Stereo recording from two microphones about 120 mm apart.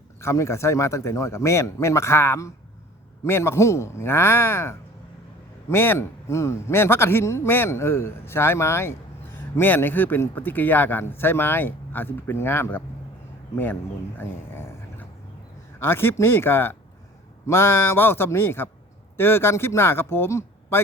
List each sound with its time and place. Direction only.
0.2 s a man's voice: 25° left (ahead or behind)
14.2 s a sound: 20° left (ahead or behind)
15.8 s a man's voice: 20° left (ahead or behind)